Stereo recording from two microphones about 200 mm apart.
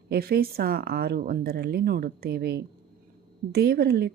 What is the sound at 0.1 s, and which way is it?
Speech, 50° right (ahead or behind).